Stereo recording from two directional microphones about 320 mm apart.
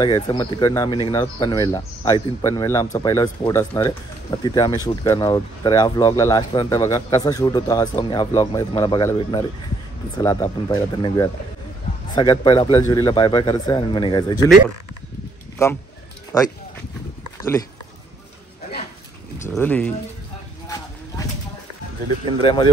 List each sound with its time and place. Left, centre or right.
0.0 s speech: centre
15.6 s speech: centre
19.5 s speech: centre
22.2 s speech: centre